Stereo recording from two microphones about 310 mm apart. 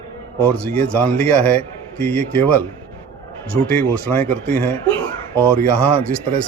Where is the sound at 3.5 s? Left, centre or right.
Centre.